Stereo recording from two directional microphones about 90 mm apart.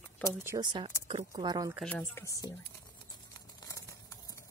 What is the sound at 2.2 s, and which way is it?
Speech, 35° left (ahead or behind).